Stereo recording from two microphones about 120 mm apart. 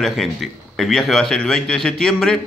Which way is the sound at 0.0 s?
Centre (ahead or behind).